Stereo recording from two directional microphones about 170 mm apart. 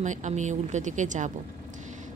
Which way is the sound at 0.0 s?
45° right (ahead or behind).